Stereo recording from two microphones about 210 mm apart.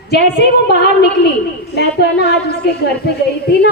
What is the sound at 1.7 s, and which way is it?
A woman's voice, 50° left (ahead or behind).